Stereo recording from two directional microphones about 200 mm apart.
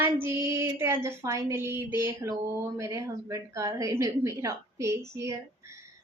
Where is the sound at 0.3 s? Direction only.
15° right (ahead or behind).